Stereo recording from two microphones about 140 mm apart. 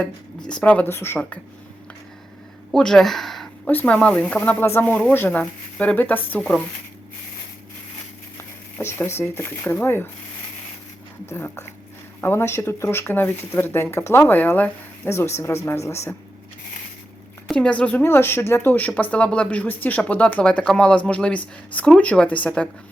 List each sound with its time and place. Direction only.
0.0 s speech: 5° left (ahead or behind)
2.7 s speech: 5° left (ahead or behind)
8.8 s speech: 20° left (ahead or behind)
11.3 s speech: 20° left (ahead or behind)
17.5 s speech: 5° left (ahead or behind)